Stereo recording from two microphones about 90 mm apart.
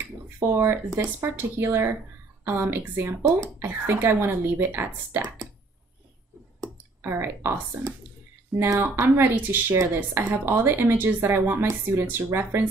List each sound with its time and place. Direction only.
0.0 s speech: 25° right (ahead or behind)
6.6 s a sound: 25° right (ahead or behind)
8.7 s speech: 25° right (ahead or behind)